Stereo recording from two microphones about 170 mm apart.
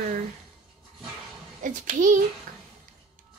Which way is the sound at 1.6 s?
50° right (ahead or behind).